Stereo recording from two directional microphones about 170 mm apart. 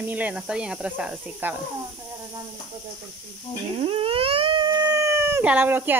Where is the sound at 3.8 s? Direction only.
35° right (ahead or behind).